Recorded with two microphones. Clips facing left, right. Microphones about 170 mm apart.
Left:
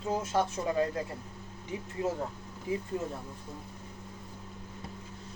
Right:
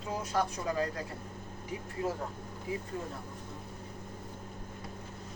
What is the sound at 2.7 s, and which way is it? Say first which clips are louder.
Speech: left 4 dB; 25° left (ahead or behind).